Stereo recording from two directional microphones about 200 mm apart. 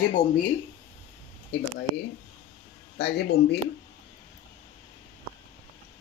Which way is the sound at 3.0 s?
55° left (ahead or behind).